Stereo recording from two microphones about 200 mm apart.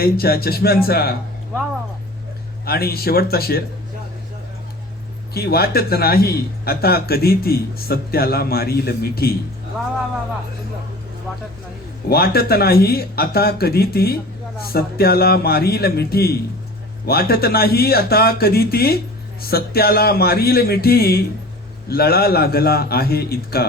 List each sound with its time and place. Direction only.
0.0 s speech: 50° left (ahead or behind)
2.6 s speech: 50° left (ahead or behind)
5.3 s speech: 50° left (ahead or behind)
12.0 s speech: 50° left (ahead or behind)